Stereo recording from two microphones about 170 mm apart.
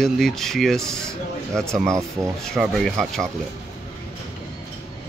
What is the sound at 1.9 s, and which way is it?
Speech, 20° right (ahead or behind).